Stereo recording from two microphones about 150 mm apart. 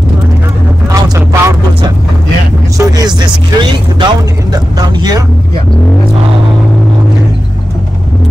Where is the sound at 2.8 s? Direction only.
25° right (ahead or behind).